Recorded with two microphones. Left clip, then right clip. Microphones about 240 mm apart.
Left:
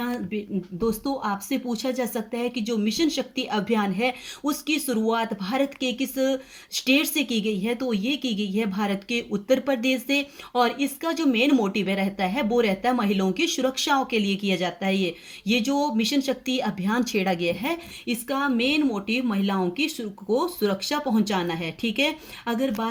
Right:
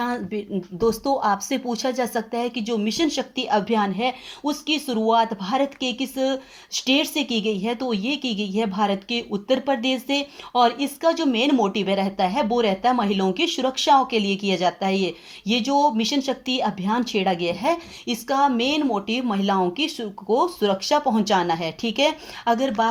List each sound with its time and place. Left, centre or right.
0.0 s speech: centre